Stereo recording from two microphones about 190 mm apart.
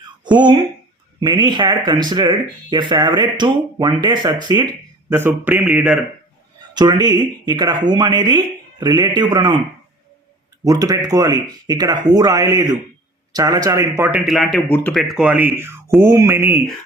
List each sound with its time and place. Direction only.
0.3 s speech: 25° right (ahead or behind); by 6.0 s 5° right (ahead or behind)
6.7 s speech: 20° right (ahead or behind)
10.7 s speech: 20° right (ahead or behind)
14.3 s speech: centre (ahead or behind)
15.9 s speech: centre (ahead or behind)
16.1 s speech: 15° right (ahead or behind)